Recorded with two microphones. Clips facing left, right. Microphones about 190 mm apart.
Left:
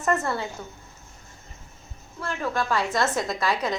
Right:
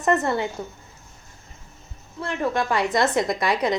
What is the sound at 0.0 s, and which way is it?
Speech, 20° right (ahead or behind).